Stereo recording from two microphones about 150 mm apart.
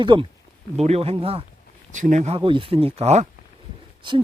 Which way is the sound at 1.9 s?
55° right (ahead or behind).